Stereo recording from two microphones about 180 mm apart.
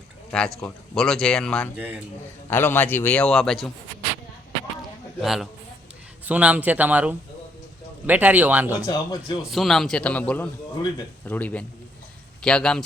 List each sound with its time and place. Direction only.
0.3 s speech: 5° left (ahead or behind)
1.7 s speech: 10° right (ahead or behind)
2.5 s a man's voice: 10° left (ahead or behind)
5.2 s speech: centre (ahead or behind)
8.9 s speech: 20° left (ahead or behind)
9.5 s a man's voice: centre (ahead or behind)